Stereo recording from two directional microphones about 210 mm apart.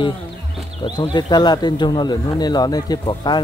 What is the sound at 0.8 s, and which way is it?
Speech, 20° left (ahead or behind).